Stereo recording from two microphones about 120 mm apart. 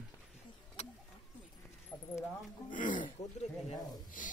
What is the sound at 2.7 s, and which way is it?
Speech, 90° left.